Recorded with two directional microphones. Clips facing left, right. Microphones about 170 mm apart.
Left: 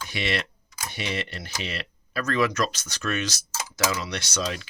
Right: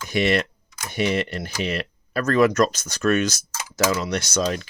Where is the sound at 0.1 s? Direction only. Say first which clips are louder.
Right 9 dB; 45° right (ahead or behind).